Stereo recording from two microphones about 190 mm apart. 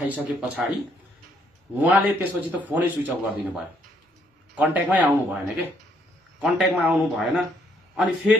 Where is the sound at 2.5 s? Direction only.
10° right (ahead or behind).